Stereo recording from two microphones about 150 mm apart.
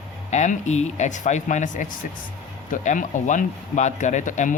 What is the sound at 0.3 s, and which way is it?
Speech, 50° left (ahead or behind).